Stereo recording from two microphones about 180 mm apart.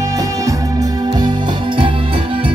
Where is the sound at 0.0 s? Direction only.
20° right (ahead or behind).